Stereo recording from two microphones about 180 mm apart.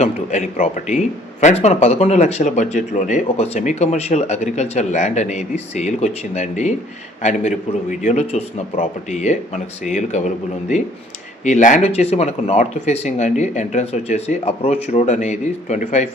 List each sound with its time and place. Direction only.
0.0 s speech: 40° left (ahead or behind)